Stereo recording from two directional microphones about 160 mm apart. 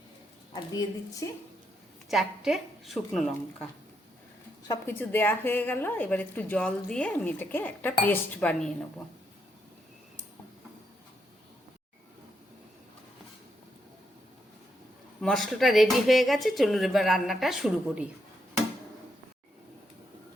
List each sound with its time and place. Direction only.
0.5 s a woman's voice: 25° left (ahead or behind)
2.0 s speech: centre (ahead or behind)
4.7 s a woman's voice: 15° left (ahead or behind)
15.2 s speech: centre (ahead or behind)